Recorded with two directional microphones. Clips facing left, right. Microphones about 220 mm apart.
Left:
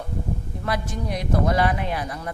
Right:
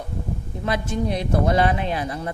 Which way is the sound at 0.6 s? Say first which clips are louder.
Right 5 dB; 25° right (ahead or behind).